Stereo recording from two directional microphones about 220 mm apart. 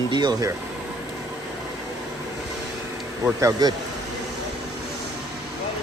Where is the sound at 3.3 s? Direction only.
15° right (ahead or behind).